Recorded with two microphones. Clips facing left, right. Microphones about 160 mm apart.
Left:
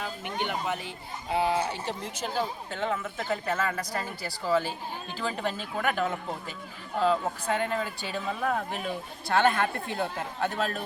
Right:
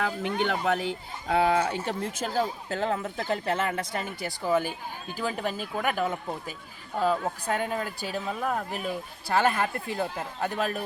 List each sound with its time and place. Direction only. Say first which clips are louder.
0.0 s speech: right 5 dB; 80° right
1.5 s speech: right 3 dB; 50° right (ahead or behind); by 10.8 s 10° right (ahead or behind)